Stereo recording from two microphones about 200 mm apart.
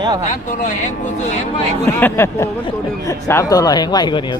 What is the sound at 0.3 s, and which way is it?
Speech, 40° left (ahead or behind).